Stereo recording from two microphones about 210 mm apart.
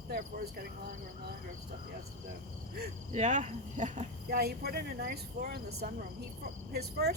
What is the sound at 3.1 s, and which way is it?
Speech, 35° right (ahead or behind).